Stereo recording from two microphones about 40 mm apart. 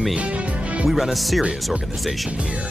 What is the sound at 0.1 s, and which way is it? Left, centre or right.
Music, right.